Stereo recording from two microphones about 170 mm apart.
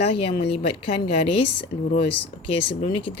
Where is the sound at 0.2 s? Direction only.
35° left (ahead or behind).